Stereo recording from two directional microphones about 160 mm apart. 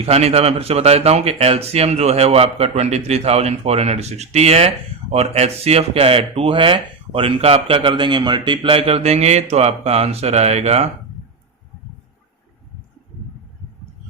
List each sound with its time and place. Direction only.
0.0 s speech: 40° right (ahead or behind)